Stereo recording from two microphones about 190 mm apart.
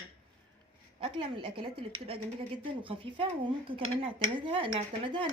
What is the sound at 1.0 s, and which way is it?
Speech, 25° right (ahead or behind).